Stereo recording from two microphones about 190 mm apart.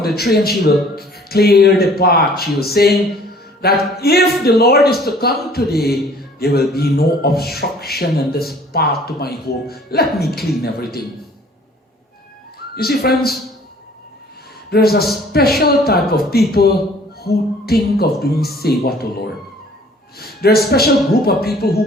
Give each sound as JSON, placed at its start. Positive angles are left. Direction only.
{"t": 0.0, "sound": "a man's voice", "side_deg": 55}
{"t": 12.7, "sound": "a man's voice", "side_deg": 55}
{"t": 14.7, "sound": "a man's voice", "side_deg": 55}